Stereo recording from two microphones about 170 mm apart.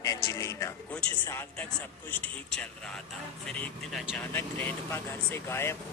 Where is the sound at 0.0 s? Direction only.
20° left (ahead or behind).